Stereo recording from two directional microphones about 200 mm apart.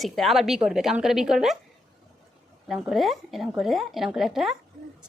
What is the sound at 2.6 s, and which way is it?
A woman's voice, centre (ahead or behind).